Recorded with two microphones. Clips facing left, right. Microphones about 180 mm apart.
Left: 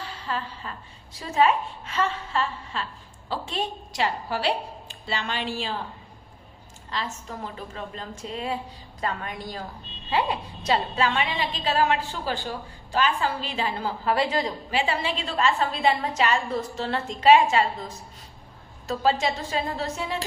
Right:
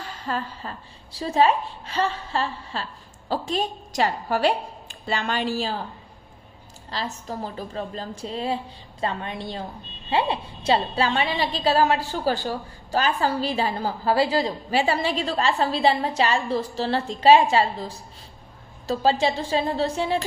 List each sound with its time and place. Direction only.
0.0 s a woman's voice: 45° right (ahead or behind)
6.9 s a woman's voice: 35° right (ahead or behind)